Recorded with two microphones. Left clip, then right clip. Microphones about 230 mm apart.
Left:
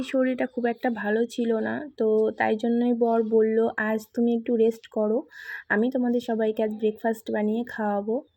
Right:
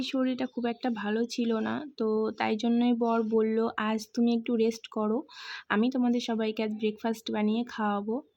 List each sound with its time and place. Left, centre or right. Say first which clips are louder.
0.0 s speech: left 6 dB; centre